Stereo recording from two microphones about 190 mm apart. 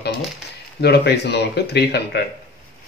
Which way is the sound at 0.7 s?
60° left (ahead or behind).